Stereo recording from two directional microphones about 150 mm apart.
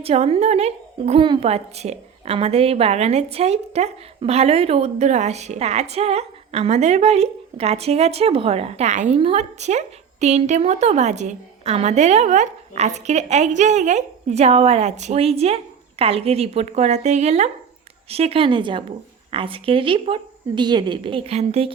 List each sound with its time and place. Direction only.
0.0 s a woman's voice: 40° right (ahead or behind)